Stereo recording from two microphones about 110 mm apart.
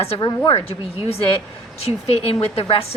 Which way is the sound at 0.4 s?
60° left (ahead or behind).